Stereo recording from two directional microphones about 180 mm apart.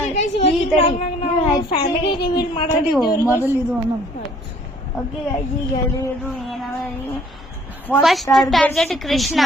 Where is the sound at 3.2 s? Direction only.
15° left (ahead or behind).